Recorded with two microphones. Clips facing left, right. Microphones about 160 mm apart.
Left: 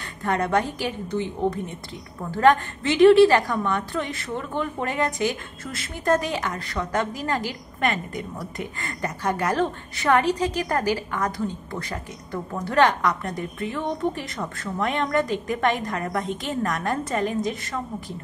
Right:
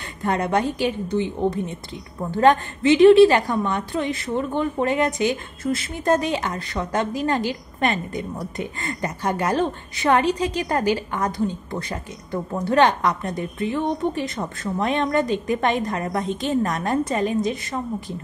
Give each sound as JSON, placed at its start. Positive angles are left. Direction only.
{"t": 0.2, "sound": "a woman's voice", "side_deg": -20}